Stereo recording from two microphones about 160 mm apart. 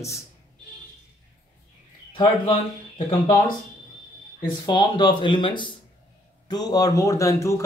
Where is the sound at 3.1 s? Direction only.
30° left (ahead or behind).